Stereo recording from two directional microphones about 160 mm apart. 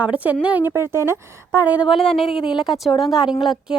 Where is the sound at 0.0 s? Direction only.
10° right (ahead or behind).